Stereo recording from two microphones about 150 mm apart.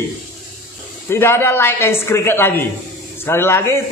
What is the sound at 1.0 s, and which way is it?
Speech, 15° left (ahead or behind).